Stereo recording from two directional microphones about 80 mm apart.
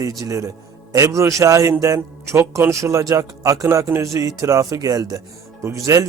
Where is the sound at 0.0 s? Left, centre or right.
Right.